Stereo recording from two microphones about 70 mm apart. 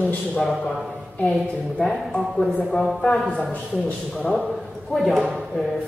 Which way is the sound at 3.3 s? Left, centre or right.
Centre.